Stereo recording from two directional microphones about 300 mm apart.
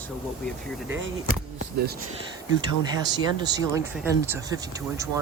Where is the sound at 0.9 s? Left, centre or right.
Right.